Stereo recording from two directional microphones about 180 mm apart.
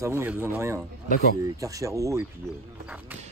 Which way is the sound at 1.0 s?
55° left (ahead or behind).